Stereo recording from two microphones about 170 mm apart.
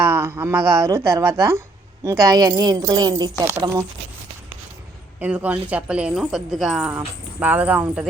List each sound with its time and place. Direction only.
0.0 s a woman's voice: 15° right (ahead or behind)
5.2 s a woman's voice: 10° right (ahead or behind)